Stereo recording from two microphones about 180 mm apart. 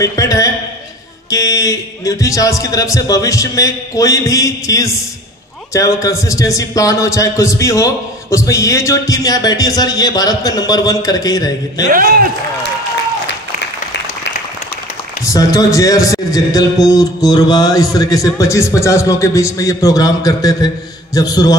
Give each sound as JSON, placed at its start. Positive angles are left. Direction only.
{"t": 0.0, "sound": "a man's voice", "side_deg": 20}
{"t": 11.9, "sound": "a man's voice", "side_deg": -55}
{"t": 15.2, "sound": "a man's voice", "side_deg": 20}